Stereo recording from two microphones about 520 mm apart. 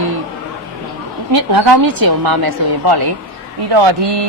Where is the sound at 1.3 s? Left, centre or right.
Right.